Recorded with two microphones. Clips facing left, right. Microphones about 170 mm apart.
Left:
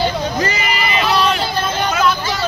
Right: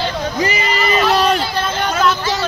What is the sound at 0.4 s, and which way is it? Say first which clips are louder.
Vehicle: right 1 dB; 20° right (ahead or behind).